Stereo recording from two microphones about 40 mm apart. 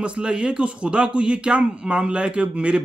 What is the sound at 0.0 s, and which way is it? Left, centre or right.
Speech, right.